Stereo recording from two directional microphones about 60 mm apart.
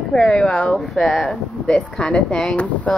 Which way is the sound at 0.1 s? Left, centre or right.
Centre.